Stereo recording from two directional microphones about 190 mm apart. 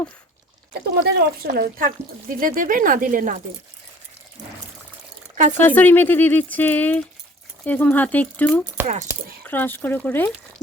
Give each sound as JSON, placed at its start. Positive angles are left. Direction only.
{"t": 0.7, "sound": "speech", "side_deg": -55}
{"t": 5.5, "sound": "speech", "side_deg": 10}